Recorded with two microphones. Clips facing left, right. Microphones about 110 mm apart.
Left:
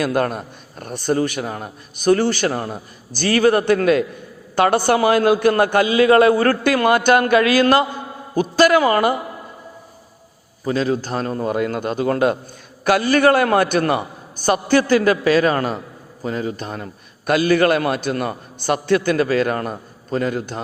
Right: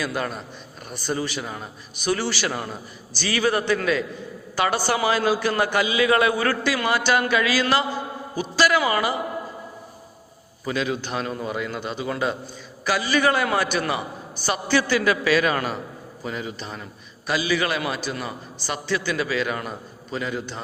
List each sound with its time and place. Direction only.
0.0 s a man's voice: 55° left (ahead or behind)
10.7 s a man's voice: 35° left (ahead or behind)